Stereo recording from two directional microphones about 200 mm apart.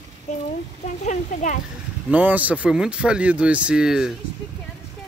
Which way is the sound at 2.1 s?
10° right (ahead or behind).